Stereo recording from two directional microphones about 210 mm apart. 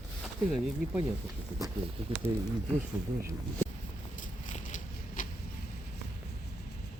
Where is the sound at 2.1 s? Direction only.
25° right (ahead or behind).